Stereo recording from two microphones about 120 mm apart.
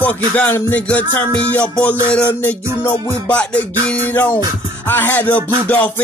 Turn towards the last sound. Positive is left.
turn(degrees=15)  # may be behind; listen again after turning